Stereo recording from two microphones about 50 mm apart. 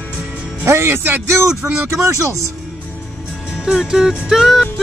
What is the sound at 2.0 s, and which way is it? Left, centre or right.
Speech, right.